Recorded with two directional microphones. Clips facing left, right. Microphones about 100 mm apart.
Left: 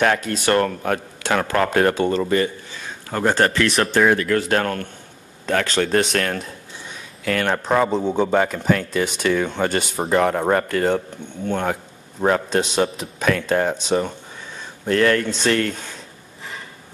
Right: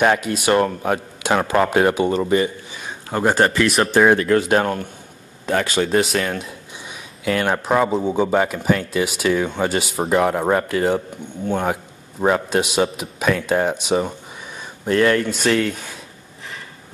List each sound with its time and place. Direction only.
0.0 s speech: 15° right (ahead or behind)
4.0 s speech: 30° right (ahead or behind)
4.5 s speech: 15° right (ahead or behind)
6.8 s a man's voice: 15° right (ahead or behind)